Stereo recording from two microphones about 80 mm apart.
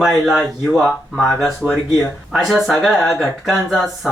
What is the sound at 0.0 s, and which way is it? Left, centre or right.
Speech, centre.